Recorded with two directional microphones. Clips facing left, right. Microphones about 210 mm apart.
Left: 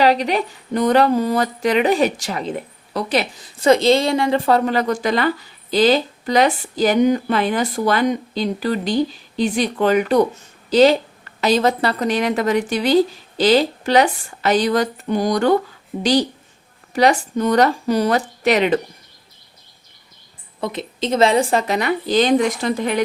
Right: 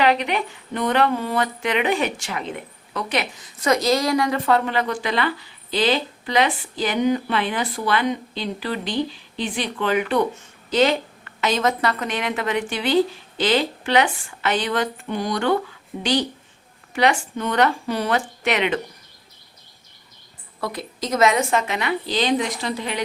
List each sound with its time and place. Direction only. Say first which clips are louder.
0.0 s speech: left 4 dB; 35° left (ahead or behind)
16.9 s speech: left 4 dB; 40° left (ahead or behind)
20.6 s a woman's voice: left 4 dB; 20° left (ahead or behind); by 23.0 s 50° left (ahead or behind)